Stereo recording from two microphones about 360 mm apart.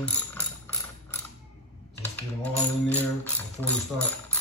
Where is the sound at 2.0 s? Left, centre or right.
Centre.